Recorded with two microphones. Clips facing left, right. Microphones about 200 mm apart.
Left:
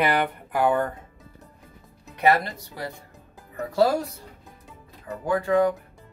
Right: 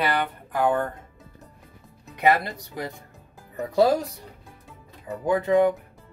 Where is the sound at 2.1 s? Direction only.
15° right (ahead or behind).